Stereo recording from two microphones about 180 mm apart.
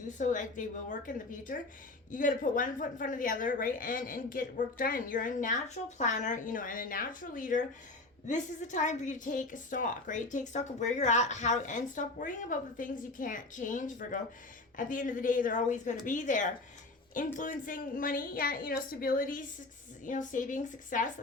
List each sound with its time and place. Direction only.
0.1 s a woman's voice: 45° left (ahead or behind)